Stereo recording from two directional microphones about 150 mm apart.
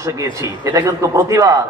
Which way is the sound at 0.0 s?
20° right (ahead or behind).